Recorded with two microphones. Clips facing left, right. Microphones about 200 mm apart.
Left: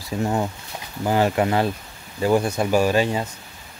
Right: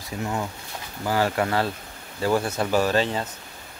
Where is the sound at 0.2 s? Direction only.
35° left (ahead or behind).